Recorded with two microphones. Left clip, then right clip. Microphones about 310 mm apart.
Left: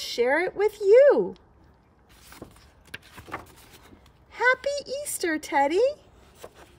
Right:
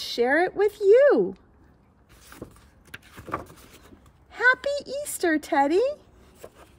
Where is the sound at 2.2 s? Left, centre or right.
Centre.